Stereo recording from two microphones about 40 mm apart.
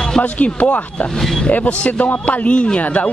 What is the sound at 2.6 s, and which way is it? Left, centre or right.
Speech, left.